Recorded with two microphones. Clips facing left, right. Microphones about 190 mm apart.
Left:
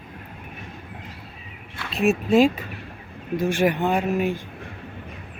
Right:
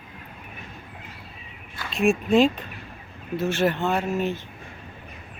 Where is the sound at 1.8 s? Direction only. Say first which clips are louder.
Even; centre (ahead or behind).